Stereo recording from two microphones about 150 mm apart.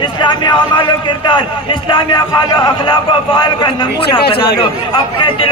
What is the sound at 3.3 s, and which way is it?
Speech, 35° left (ahead or behind).